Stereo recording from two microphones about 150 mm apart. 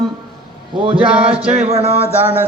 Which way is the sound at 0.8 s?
35° right (ahead or behind).